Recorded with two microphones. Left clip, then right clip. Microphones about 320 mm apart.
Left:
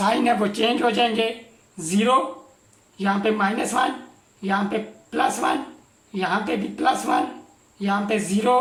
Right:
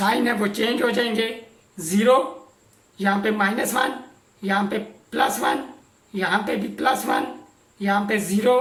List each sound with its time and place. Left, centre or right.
0.0 s speech: centre